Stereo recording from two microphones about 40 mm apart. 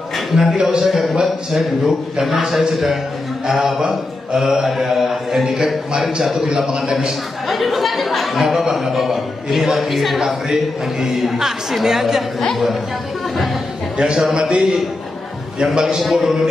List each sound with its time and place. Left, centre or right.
0.3 s speech: centre
0.7 s a man's voice: centre
1.2 s a man's voice: centre
5.7 s speech: centre
6.4 s a man's voice: centre
7.4 s speech: centre
10.2 s a man's voice: centre
13.9 s a man's voice: right
15.6 s a man's voice: centre
16.0 s speech: centre